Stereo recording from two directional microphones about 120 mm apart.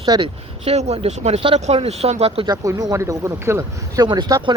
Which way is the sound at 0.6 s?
55° right (ahead or behind).